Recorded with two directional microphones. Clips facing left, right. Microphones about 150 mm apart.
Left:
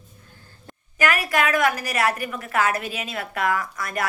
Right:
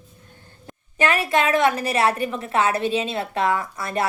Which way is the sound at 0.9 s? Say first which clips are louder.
Right 2 dB; 25° right (ahead or behind).